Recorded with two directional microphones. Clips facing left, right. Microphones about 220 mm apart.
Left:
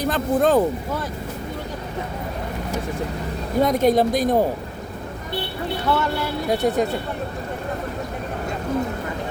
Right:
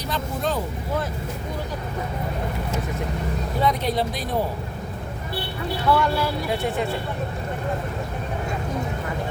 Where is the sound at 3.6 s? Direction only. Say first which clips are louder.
Left 7 dB; 45° left (ahead or behind).